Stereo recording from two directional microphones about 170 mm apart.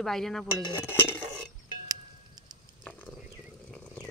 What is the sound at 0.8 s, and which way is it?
Stir, 10° left (ahead or behind).